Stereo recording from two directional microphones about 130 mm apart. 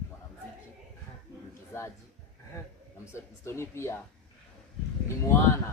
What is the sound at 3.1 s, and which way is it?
Speech, 20° left (ahead or behind).